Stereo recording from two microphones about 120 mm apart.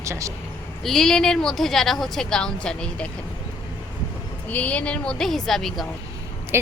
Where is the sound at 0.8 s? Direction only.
5° left (ahead or behind).